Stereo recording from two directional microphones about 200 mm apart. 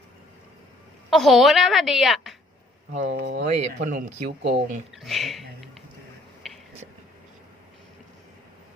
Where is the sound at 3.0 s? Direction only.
65° right (ahead or behind).